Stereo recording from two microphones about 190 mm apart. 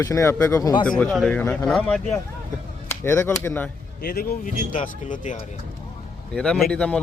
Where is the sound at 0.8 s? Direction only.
5° left (ahead or behind).